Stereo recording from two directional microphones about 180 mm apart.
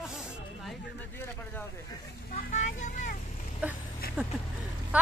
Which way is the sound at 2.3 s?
40° left (ahead or behind).